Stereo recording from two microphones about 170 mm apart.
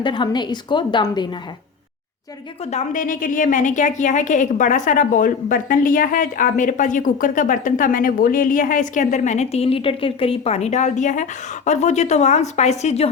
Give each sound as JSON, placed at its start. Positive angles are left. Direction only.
{"t": 0.0, "sound": "a woman's voice", "side_deg": 25}
{"t": 2.6, "sound": "a woman's voice", "side_deg": 45}